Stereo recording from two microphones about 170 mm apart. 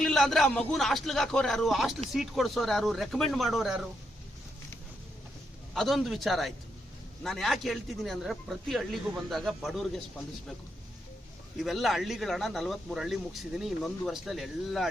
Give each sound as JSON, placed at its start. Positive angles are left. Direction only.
{"t": 0.0, "sound": "a man's voice", "side_deg": 0}
{"t": 5.7, "sound": "speech", "side_deg": 0}
{"t": 11.5, "sound": "speech", "side_deg": 0}